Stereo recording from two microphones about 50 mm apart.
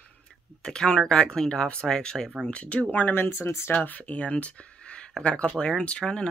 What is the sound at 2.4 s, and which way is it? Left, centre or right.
Speech, left.